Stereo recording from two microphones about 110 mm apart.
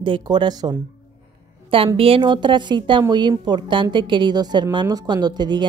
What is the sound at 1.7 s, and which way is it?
A woman's voice, 55° right (ahead or behind).